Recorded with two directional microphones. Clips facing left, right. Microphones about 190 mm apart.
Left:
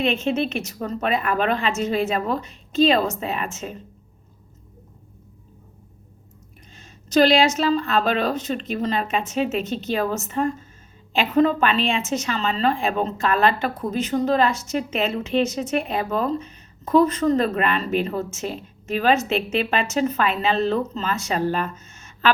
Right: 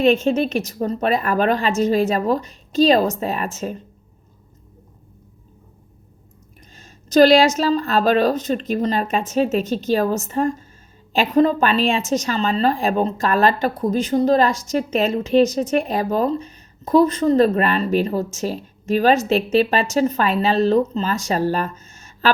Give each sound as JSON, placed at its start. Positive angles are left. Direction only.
{"t": 0.0, "sound": "speech", "side_deg": -40}
{"t": 6.7, "sound": "a woman's voice", "side_deg": -40}